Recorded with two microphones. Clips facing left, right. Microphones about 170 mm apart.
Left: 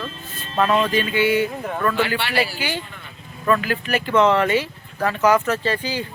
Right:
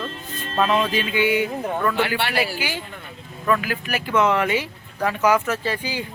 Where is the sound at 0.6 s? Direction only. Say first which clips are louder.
Left 2 dB; 10° right (ahead or behind).